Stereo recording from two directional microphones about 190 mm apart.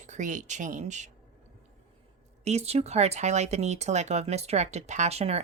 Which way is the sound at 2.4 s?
35° right (ahead or behind).